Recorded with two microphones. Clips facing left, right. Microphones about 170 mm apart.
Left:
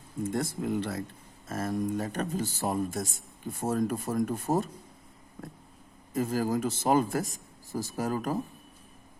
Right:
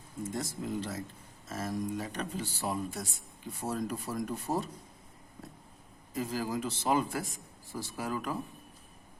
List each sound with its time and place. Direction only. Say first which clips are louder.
0.3 s speech: left 6 dB; 60° left (ahead or behind)
6.1 s speech: left 6 dB; 50° left (ahead or behind)